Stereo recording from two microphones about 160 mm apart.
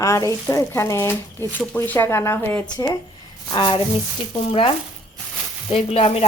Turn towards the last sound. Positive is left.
turn(degrees=35)  # may be behind; listen again after turning